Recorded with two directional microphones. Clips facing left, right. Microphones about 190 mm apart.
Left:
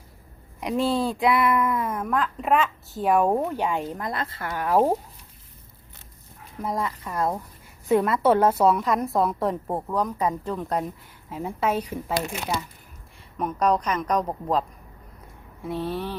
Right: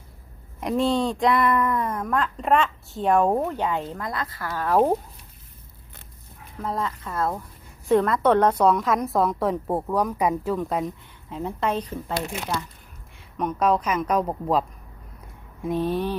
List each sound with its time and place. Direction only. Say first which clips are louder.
0.6 s a woman's voice: right 1 dB; centre (ahead or behind)
6.6 s a woman's voice: even; 10° left (ahead or behind)
13.3 s a woman's voice: right 1 dB; centre (ahead or behind)
15.6 s a sound: right 4 dB; 15° right (ahead or behind)